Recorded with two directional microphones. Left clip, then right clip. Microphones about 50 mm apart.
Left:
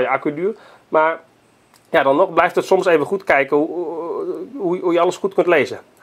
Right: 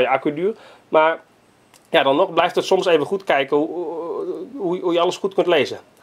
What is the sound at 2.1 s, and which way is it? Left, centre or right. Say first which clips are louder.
Speech: left 2 dB; left.